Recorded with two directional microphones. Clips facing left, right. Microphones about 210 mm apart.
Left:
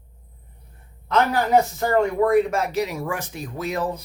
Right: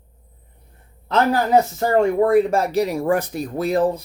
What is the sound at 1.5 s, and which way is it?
Speech, 30° right (ahead or behind).